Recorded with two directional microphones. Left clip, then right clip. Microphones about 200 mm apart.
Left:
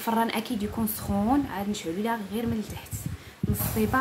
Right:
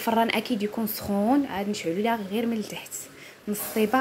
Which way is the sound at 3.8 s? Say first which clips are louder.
Right 4 dB; 25° right (ahead or behind).